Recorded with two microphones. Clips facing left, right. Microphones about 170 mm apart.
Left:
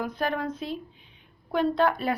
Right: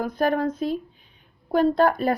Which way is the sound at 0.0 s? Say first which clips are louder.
Right 6 dB; 45° right (ahead or behind).